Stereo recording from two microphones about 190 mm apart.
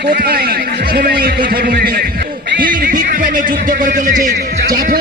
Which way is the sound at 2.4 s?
50° right (ahead or behind).